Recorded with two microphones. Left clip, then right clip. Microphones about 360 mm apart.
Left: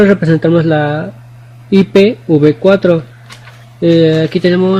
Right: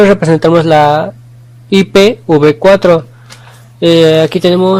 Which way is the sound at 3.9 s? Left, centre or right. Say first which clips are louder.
Right 3 dB; right.